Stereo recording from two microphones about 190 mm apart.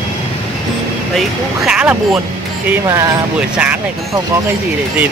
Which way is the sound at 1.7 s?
5° right (ahead or behind).